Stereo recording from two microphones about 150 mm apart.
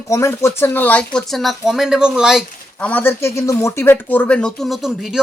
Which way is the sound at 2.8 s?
10° left (ahead or behind).